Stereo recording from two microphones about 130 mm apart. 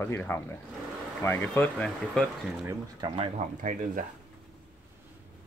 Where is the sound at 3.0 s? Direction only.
40° right (ahead or behind).